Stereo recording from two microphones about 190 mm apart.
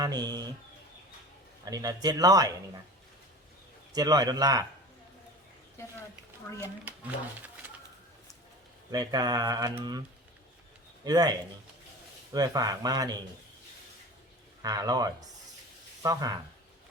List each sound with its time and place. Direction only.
0.0 s speech: 20° right (ahead or behind)
1.6 s speech: 20° right (ahead or behind)
3.9 s speech: 20° right (ahead or behind)
6.8 s speech: 10° right (ahead or behind)
8.9 s speech: 20° right (ahead or behind)
11.0 s speech: 20° right (ahead or behind)
14.6 s speech: 20° right (ahead or behind)